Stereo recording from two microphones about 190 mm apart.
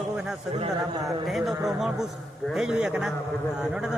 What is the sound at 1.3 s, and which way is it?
A man's voice, centre (ahead or behind).